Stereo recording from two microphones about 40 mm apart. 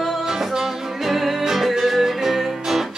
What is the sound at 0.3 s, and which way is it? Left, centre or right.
Music, centre.